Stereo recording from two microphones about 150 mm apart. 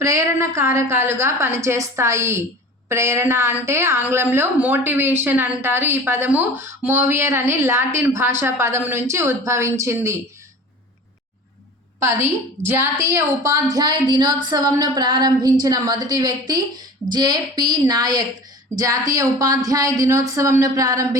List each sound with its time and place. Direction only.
0.0 s a woman's voice: 20° right (ahead or behind)
11.9 s a woman's voice: 15° right (ahead or behind)